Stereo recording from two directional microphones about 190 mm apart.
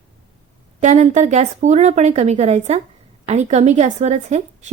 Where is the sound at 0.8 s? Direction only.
40° right (ahead or behind).